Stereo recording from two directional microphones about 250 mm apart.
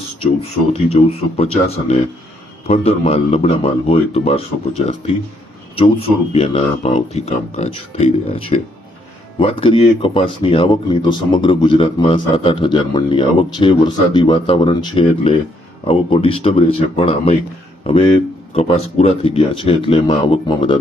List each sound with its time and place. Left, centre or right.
0.2 s speech: left